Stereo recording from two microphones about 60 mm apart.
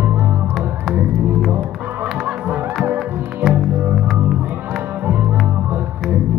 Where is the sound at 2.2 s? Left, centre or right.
Right.